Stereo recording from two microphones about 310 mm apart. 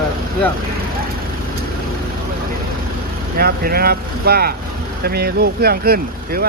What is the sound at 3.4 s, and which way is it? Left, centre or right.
Speech, right.